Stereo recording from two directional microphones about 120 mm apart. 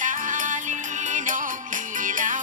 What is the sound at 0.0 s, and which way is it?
Music, 90° right.